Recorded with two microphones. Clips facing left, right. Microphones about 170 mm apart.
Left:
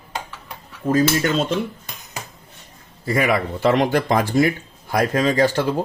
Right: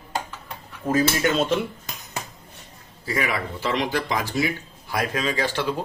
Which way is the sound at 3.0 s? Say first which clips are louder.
Left 7 dB; 55° left (ahead or behind).